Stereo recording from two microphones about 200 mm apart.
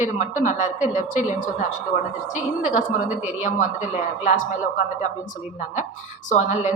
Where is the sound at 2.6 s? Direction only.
5° right (ahead or behind).